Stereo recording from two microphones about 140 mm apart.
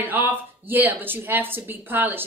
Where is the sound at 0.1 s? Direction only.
15° right (ahead or behind).